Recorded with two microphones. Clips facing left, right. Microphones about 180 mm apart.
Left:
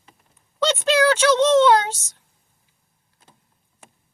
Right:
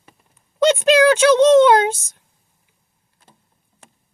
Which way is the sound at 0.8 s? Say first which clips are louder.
Right 3 dB; 15° right (ahead or behind).